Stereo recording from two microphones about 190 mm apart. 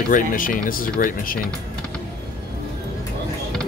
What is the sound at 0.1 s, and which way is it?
Speech, 45° left (ahead or behind).